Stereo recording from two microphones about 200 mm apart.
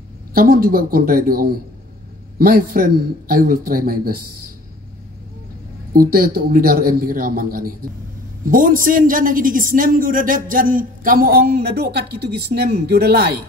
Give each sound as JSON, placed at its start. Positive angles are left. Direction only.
{"t": 0.3, "sound": "a man's voice", "side_deg": -45}
{"t": 5.9, "sound": "a man's voice", "side_deg": -45}